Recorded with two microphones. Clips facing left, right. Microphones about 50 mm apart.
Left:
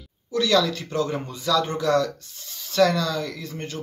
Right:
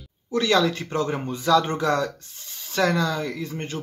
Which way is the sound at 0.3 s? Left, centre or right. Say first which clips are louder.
Even; right.